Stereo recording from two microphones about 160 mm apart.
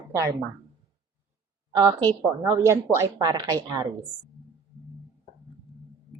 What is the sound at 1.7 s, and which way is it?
A woman's voice, 25° right (ahead or behind).